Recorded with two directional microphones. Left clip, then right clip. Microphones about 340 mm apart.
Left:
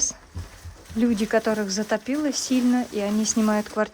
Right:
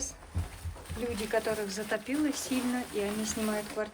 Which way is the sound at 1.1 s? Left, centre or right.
Left.